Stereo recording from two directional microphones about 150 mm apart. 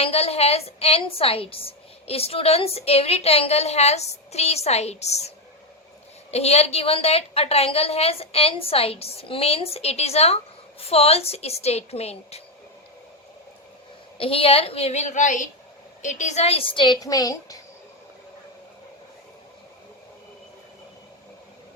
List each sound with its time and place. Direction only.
0.0 s a woman's voice: 40° left (ahead or behind)
6.3 s a woman's voice: 45° left (ahead or behind)
14.2 s a woman's voice: 40° left (ahead or behind); by 17.6 s 25° left (ahead or behind)